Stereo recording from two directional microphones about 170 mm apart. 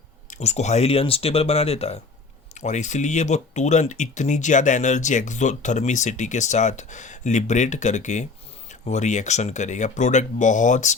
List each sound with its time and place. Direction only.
0.3 s speech: 40° left (ahead or behind)